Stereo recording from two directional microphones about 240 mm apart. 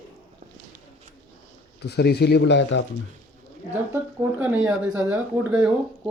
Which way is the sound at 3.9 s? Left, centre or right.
Centre.